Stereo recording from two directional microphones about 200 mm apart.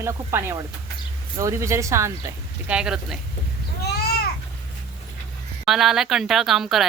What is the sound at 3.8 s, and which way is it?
Babbling, 50° left (ahead or behind).